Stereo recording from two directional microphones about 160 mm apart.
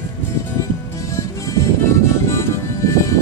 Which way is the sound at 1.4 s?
20° left (ahead or behind).